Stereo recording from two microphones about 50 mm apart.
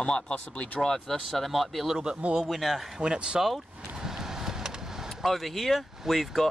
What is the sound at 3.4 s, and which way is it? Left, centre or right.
Vehicle, centre.